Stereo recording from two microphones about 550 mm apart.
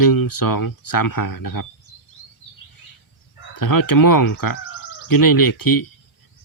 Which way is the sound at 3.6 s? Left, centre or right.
Left.